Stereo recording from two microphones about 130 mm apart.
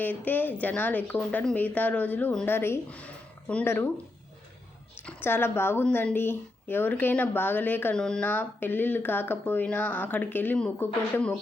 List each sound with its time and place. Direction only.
0.0 s a woman's voice: 15° left (ahead or behind)
5.0 s a woman's voice: 15° left (ahead or behind)